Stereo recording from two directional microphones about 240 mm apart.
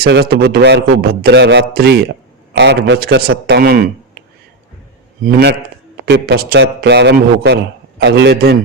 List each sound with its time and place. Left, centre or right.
0.0 s a man's voice: right
5.2 s a man's voice: right